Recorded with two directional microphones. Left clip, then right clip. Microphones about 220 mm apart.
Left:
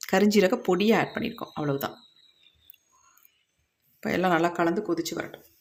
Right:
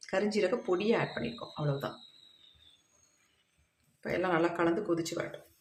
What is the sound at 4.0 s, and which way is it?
Speech, 50° left (ahead or behind).